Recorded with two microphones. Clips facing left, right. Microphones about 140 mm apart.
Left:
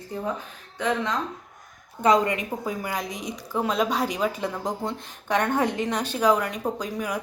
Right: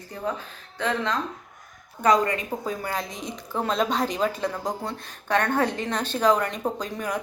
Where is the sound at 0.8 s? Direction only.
15° left (ahead or behind).